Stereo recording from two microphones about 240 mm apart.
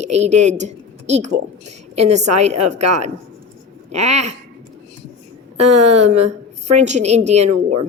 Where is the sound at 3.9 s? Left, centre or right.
Right.